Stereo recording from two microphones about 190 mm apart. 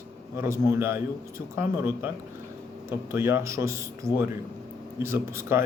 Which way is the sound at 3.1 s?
15° right (ahead or behind).